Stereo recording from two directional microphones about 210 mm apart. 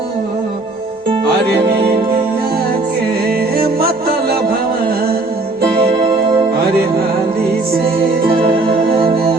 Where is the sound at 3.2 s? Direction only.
45° right (ahead or behind).